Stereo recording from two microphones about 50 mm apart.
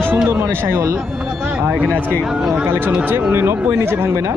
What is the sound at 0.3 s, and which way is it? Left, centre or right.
Speech, right.